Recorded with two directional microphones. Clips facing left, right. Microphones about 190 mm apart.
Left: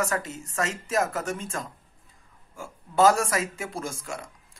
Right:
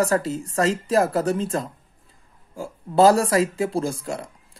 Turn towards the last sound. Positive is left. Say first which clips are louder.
# right 8 dB
turn(degrees=-35)  # may be behind; listen again after turning